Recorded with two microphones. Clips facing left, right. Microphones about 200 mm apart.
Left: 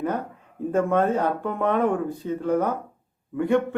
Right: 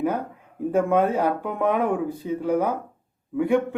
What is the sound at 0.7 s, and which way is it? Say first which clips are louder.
A man's voice: right 1 dB; 5° right (ahead or behind).